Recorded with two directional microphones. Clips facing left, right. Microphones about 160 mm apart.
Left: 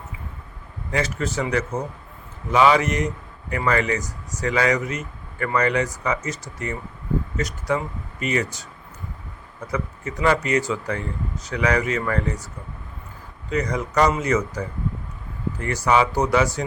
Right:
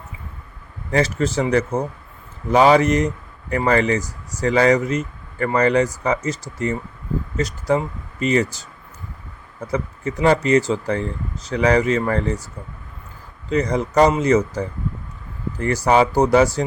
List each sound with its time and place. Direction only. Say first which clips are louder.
0.9 s speech: right 5 dB; 35° right (ahead or behind)
9.7 s speech: right 4 dB; 30° right (ahead or behind)
13.5 s speech: right 4 dB; 30° right (ahead or behind)
15.6 s speech: right 4 dB; 35° right (ahead or behind)